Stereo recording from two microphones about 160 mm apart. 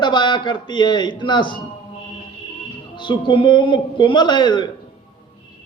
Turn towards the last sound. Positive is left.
turn(degrees=30)  # may be behind; listen again after turning